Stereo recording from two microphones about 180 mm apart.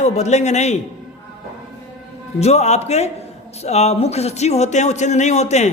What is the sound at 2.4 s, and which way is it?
A man's voice, 35° left (ahead or behind).